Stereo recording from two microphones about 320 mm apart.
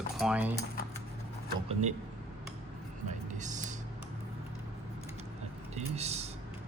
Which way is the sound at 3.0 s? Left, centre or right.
Right.